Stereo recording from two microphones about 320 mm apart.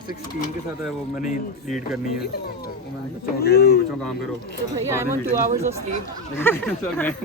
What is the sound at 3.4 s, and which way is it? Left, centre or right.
Speech, left.